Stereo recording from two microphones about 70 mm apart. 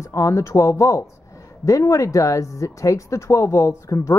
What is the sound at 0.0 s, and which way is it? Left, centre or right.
Speech, left.